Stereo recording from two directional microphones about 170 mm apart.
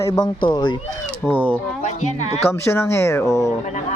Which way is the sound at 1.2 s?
10° left (ahead or behind).